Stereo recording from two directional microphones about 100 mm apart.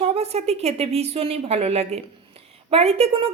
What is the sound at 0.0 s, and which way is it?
A woman's voice, 90° right.